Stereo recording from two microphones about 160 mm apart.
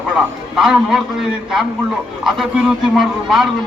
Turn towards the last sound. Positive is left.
turn(degrees=0)  # may be behind; listen again after turning